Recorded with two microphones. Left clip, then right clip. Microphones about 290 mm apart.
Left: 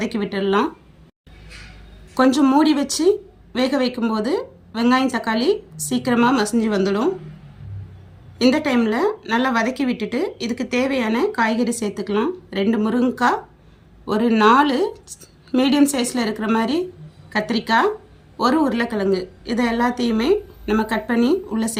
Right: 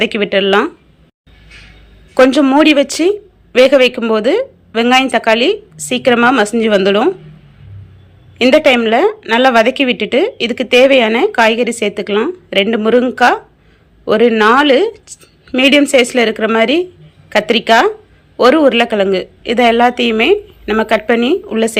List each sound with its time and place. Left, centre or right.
0.0 s a woman's voice: centre
2.3 s speech: centre
8.8 s a woman's voice: centre